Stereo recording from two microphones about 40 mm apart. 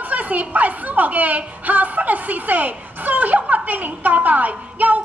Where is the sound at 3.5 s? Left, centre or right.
Right.